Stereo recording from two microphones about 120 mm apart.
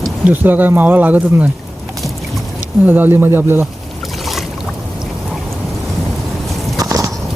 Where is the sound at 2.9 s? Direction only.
15° right (ahead or behind).